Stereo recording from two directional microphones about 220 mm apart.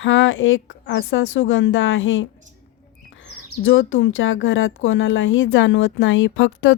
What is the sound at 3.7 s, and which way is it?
Speech, 60° left (ahead or behind).